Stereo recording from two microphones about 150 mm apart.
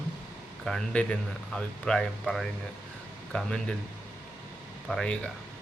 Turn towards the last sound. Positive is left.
turn(degrees=5)  # may be behind; listen again after turning